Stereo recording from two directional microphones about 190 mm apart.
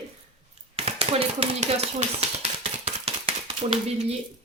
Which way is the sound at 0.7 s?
30° right (ahead or behind).